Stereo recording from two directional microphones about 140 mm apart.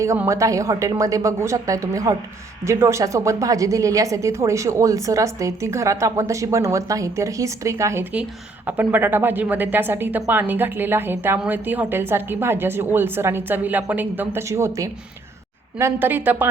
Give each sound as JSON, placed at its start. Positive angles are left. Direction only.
{"t": 0.3, "sound": "a woman's voice", "side_deg": -20}